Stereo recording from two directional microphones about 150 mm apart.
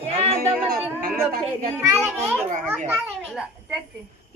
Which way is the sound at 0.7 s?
85° right.